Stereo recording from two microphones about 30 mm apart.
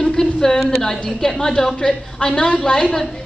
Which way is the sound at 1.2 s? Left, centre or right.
Centre.